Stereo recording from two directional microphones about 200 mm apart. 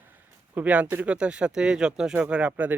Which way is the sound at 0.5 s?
5° right (ahead or behind).